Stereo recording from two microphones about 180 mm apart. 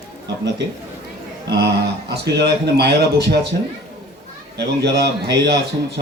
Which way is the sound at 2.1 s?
65° right (ahead or behind).